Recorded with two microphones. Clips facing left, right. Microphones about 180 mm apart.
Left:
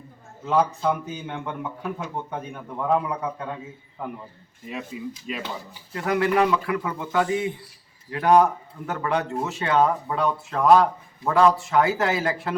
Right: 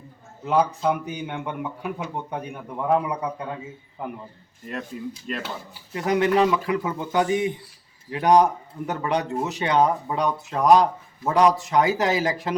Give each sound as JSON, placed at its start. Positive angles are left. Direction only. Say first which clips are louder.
{"t": 0.4, "sound": "a man's voice", "louder": "right 1 dB", "side_deg": -15}
{"t": 4.6, "sound": "speech", "louder": "right 1 dB", "side_deg": 5}
{"t": 5.9, "sound": "a man's voice", "louder": "right 2 dB", "side_deg": -20}